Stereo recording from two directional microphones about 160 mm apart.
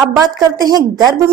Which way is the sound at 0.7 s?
25° right (ahead or behind).